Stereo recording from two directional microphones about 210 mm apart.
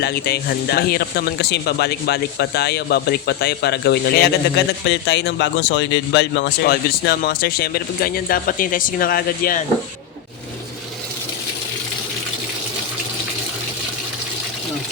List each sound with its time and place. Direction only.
0.0 s a man's voice: 50° left (ahead or behind)